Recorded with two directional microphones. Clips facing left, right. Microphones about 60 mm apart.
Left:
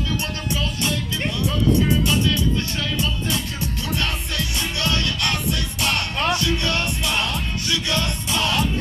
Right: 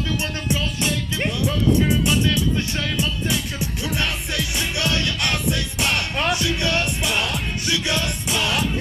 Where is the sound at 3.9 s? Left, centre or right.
Right.